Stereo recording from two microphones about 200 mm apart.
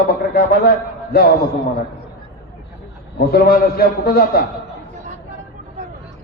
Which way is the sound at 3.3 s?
50° left (ahead or behind).